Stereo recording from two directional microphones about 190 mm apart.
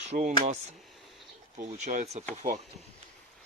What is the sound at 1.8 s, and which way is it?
Speech, 35° right (ahead or behind).